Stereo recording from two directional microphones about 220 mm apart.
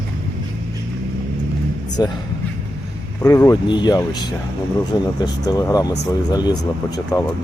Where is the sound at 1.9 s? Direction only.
20° left (ahead or behind).